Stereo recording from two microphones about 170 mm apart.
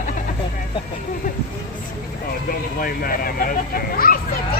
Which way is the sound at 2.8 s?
55° left (ahead or behind).